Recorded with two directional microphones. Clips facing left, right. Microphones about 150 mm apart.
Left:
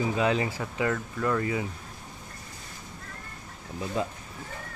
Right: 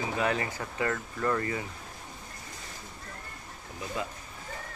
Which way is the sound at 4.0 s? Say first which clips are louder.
Left 5 dB; 30° left (ahead or behind).